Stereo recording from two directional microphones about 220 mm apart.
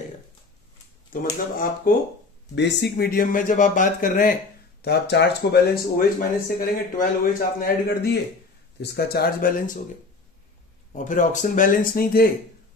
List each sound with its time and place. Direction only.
1.1 s speech: 40° left (ahead or behind)
2.5 s speech: 50° left (ahead or behind)
10.9 s speech: 35° left (ahead or behind)